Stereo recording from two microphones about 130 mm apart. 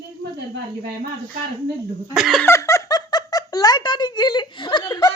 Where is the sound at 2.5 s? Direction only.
25° left (ahead or behind).